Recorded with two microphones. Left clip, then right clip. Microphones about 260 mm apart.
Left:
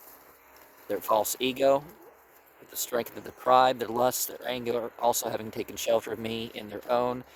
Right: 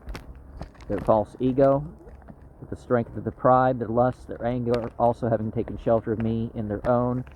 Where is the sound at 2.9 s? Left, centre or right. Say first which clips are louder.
Right 6 dB; left.